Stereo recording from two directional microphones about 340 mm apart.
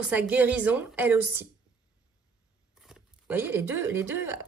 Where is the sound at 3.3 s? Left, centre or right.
Centre.